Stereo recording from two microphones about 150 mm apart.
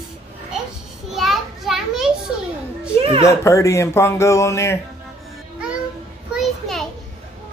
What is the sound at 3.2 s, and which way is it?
Speech, 20° left (ahead or behind).